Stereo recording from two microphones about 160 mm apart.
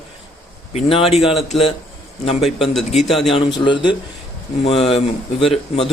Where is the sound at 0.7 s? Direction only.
40° left (ahead or behind).